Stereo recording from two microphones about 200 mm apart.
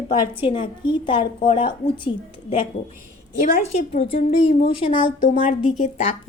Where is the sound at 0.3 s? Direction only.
25° left (ahead or behind).